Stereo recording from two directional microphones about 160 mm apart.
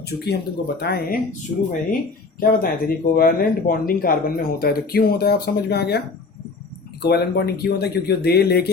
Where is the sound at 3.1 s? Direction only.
65° left (ahead or behind).